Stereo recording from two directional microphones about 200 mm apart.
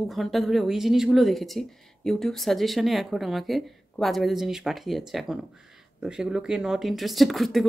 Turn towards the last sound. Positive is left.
turn(degrees=0)  # may be behind; listen again after turning